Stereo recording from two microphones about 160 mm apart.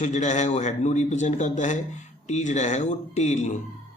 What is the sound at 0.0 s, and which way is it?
A man's voice, 50° left (ahead or behind).